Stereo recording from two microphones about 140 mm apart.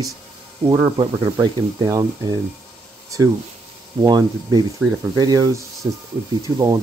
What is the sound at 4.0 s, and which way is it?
Speech, 30° right (ahead or behind).